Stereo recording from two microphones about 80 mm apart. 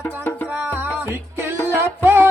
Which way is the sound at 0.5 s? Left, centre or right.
Right.